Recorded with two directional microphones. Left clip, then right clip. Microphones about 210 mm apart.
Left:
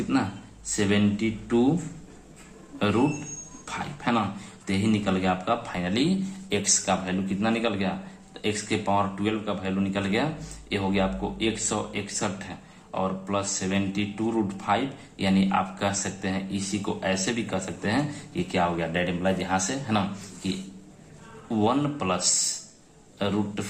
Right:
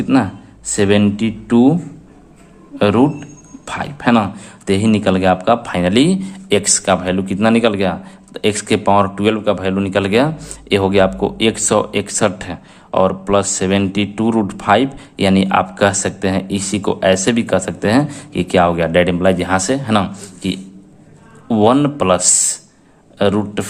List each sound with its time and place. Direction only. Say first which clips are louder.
0.1 s speech: right 13 dB; 55° right (ahead or behind)
2.7 s speech: right 11 dB; 55° right (ahead or behind)